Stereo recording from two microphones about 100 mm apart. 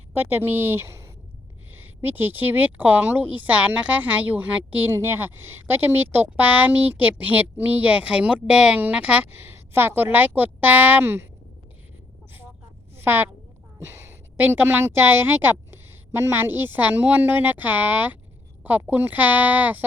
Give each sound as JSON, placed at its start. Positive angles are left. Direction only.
{"t": 0.1, "sound": "a woman's voice", "side_deg": -20}
{"t": 4.9, "sound": "a woman's voice", "side_deg": -25}
{"t": 13.0, "sound": "a woman's voice", "side_deg": -20}